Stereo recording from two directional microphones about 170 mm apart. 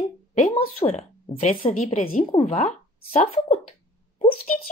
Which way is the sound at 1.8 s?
50° left (ahead or behind).